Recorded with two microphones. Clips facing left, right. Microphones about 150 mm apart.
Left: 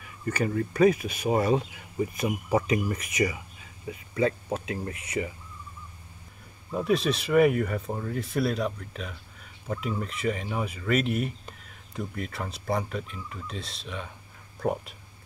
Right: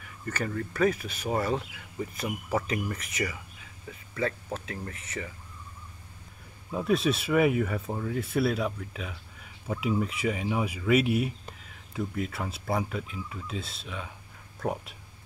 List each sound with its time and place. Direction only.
0.3 s speech: 15° left (ahead or behind)
6.7 s speech: centre (ahead or behind)